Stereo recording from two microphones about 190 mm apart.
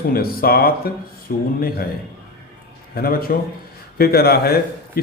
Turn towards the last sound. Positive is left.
turn(degrees=55)  # may be behind; listen again after turning